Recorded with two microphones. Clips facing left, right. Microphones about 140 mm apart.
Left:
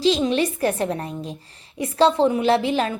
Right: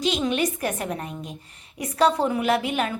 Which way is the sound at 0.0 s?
30° left (ahead or behind).